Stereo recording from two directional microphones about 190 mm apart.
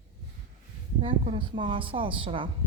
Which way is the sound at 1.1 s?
25° right (ahead or behind).